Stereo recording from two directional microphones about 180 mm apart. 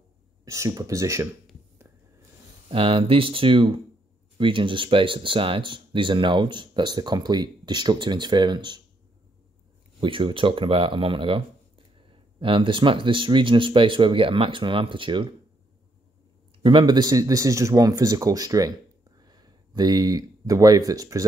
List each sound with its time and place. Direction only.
0.5 s speech: 20° right (ahead or behind)
2.7 s speech: 30° right (ahead or behind)
9.9 s speech: 30° right (ahead or behind)
16.6 s speech: 25° right (ahead or behind)